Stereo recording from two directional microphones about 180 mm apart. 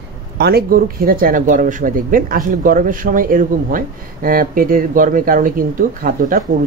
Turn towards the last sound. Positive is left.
turn(degrees=-50)  # may be behind; listen again after turning